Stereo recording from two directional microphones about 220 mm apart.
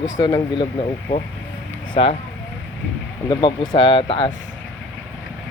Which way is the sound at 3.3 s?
20° left (ahead or behind).